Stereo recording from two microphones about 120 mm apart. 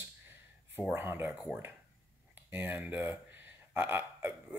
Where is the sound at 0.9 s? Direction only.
20° right (ahead or behind).